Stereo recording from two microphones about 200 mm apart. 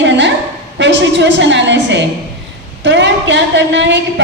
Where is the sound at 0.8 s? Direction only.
60° right (ahead or behind).